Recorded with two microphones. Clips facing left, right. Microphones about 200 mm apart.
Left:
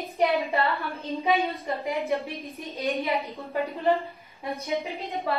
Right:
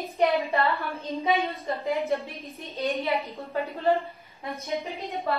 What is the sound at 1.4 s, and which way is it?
A woman's voice, 15° left (ahead or behind).